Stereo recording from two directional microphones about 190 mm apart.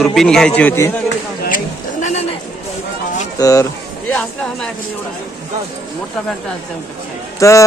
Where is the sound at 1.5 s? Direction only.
40° left (ahead or behind).